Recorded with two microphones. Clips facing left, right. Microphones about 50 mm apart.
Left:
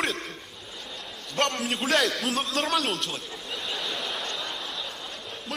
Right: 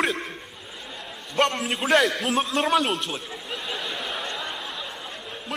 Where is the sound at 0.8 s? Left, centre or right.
Centre.